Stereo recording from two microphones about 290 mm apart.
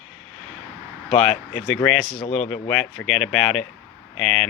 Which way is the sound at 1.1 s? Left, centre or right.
Centre.